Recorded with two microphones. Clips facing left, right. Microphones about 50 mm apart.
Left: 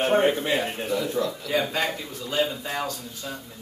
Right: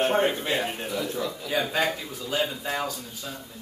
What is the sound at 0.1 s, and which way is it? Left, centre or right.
Speech, centre.